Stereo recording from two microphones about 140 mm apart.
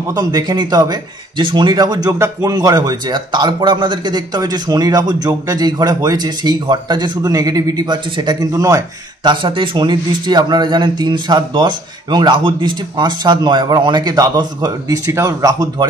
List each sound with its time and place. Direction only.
0.1 s a man's voice: 30° right (ahead or behind)